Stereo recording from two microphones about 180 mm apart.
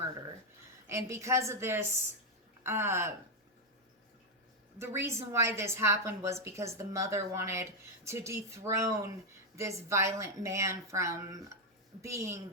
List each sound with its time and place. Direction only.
0.9 s a woman's voice: 15° right (ahead or behind)
4.8 s a woman's voice: 15° right (ahead or behind)